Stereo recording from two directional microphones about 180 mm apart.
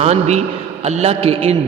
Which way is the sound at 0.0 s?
35° right (ahead or behind).